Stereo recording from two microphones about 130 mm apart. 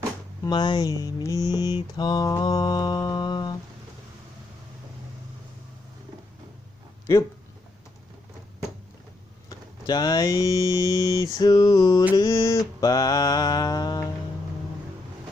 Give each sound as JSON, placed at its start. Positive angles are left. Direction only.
{"t": 0.4, "sound": "speech", "side_deg": 35}
{"t": 2.0, "sound": "mantra", "side_deg": 30}
{"t": 9.5, "sound": "speech", "side_deg": 30}